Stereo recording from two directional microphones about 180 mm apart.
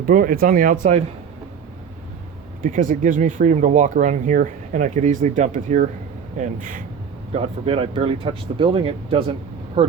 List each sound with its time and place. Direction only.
0.0 s speech: 50° right (ahead or behind)
2.6 s speech: 50° right (ahead or behind)
7.3 s speech: 30° right (ahead or behind)